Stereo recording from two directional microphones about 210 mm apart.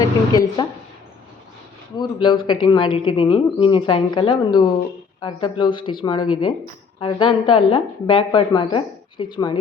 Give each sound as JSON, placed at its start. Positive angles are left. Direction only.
{"t": 0.0, "sound": "a woman's voice", "side_deg": 20}
{"t": 2.0, "sound": "speech", "side_deg": 25}